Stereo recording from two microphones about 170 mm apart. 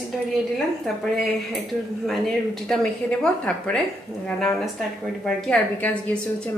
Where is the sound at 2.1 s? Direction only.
Centre (ahead or behind).